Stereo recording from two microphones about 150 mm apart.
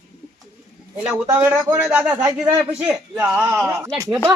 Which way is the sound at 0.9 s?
10° right (ahead or behind).